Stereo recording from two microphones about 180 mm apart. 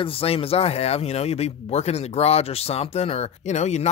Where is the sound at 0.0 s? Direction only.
30° left (ahead or behind).